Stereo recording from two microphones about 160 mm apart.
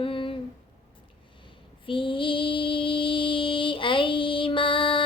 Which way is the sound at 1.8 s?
35° left (ahead or behind).